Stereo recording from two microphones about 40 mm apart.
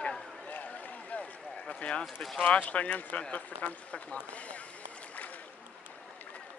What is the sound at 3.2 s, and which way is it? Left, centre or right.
Speech, left.